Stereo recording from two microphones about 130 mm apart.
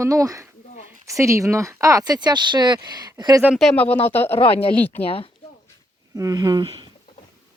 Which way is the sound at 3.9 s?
50° left (ahead or behind).